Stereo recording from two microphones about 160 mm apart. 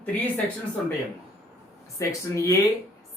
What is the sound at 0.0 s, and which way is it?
Speech, 10° left (ahead or behind).